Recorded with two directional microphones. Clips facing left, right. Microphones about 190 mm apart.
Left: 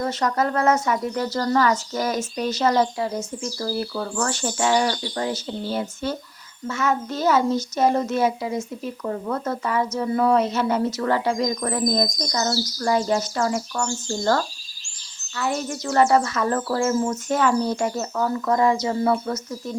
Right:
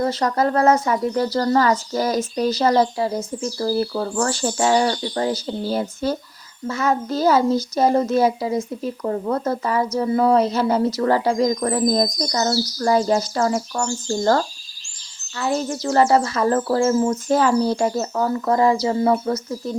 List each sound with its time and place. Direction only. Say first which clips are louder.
0.0 s speech: right 3 dB; 35° right (ahead or behind)